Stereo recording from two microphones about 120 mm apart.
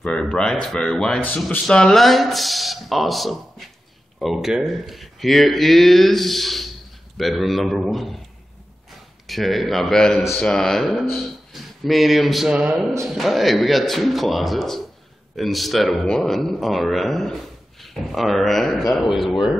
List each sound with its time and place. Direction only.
0.0 s a man's voice: 10° left (ahead or behind)
9.3 s a man's voice: centre (ahead or behind)
11.1 s a sound: centre (ahead or behind)
13.0 s a man's voice: centre (ahead or behind)